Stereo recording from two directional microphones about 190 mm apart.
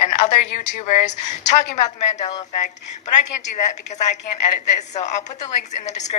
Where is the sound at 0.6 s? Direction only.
40° left (ahead or behind).